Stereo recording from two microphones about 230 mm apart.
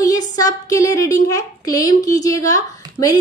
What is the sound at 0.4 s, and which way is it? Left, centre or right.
A woman's voice, centre.